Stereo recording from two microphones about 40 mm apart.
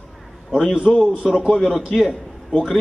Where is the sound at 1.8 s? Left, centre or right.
Centre.